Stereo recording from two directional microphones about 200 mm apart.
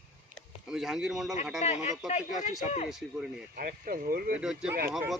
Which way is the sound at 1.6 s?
35° left (ahead or behind).